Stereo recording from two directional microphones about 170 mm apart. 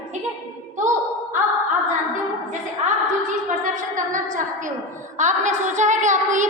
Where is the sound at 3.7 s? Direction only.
50° right (ahead or behind).